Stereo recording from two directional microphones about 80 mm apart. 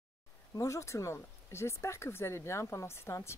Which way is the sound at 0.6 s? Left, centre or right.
Left.